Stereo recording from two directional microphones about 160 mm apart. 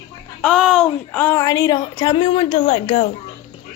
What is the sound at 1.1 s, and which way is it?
A woman's voice, 10° left (ahead or behind).